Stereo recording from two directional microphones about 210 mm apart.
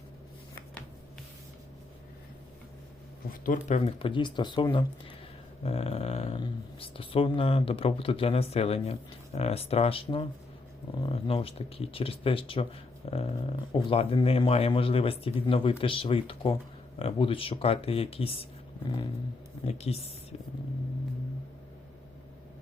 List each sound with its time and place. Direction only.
3.2 s speech: 40° left (ahead or behind)
19.6 s speech: 30° left (ahead or behind)